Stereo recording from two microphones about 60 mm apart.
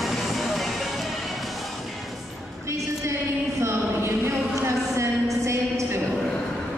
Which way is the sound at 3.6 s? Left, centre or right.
Right.